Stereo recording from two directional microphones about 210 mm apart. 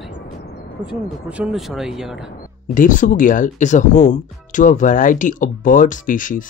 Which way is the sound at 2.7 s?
40° left (ahead or behind).